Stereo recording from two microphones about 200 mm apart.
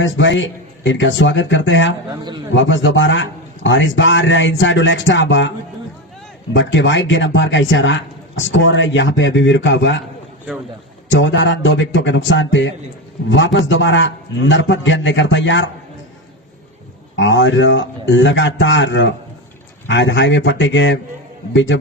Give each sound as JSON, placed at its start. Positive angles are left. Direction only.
{"t": 0.0, "sound": "a man's voice", "side_deg": 70}
{"t": 6.5, "sound": "a man's voice", "side_deg": 65}
{"t": 11.1, "sound": "a man's voice", "side_deg": 65}
{"t": 17.2, "sound": "a man's voice", "side_deg": 70}